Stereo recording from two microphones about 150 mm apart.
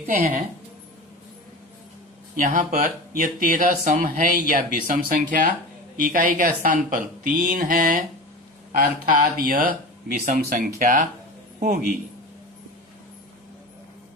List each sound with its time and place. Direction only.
2.3 s speech: 60° right (ahead or behind)